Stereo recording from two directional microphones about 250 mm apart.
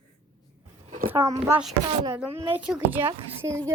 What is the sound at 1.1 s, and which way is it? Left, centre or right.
Speech, centre.